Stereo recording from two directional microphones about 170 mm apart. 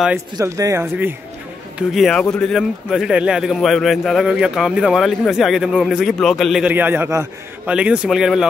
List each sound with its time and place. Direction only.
0.4 s a man's voice: 20° right (ahead or behind)
1.8 s speech: centre (ahead or behind)